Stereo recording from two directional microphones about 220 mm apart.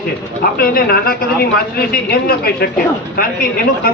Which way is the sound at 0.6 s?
40° left (ahead or behind).